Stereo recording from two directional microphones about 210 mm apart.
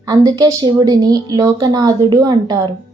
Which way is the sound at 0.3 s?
20° right (ahead or behind).